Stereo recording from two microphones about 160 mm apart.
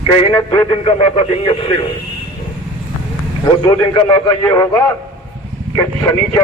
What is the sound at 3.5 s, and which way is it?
A man's voice, 30° left (ahead or behind).